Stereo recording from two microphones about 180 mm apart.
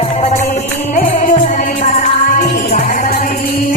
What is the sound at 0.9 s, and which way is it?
Music, 45° left (ahead or behind).